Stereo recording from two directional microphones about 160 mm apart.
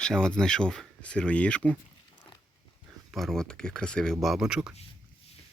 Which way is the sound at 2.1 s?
25° left (ahead or behind).